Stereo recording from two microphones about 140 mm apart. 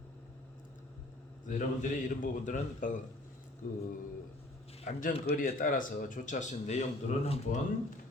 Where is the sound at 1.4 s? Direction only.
65° left (ahead or behind).